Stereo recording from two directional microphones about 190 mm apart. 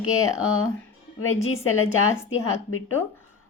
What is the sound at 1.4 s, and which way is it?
Speech, 90° left.